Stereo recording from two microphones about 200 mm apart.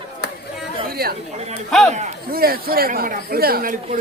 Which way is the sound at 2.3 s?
50° right (ahead or behind).